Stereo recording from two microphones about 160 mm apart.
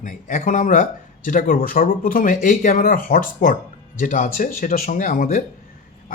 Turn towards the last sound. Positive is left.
turn(degrees=60)  # may be behind; listen again after turning